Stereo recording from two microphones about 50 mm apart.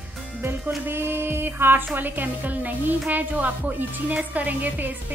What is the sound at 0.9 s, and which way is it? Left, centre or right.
A woman's voice, right.